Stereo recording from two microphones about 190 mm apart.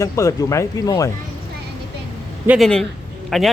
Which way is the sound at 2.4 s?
Centre (ahead or behind).